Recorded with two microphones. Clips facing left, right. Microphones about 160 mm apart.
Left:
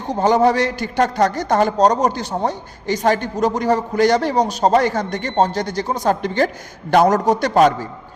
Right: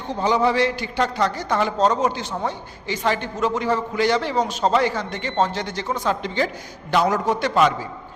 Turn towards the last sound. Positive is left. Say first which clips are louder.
# left 5 dB
turn(degrees=40)  # may be behind; listen again after turning